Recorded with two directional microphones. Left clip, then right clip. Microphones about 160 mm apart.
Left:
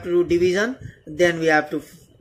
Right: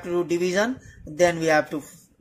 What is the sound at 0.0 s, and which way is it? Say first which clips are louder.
Speech: left 6 dB; 30° right (ahead or behind).